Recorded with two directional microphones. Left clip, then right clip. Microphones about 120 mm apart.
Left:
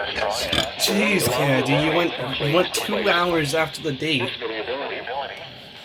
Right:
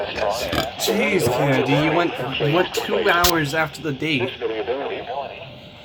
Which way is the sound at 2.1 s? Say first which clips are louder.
Right 2 dB; 45° right (ahead or behind).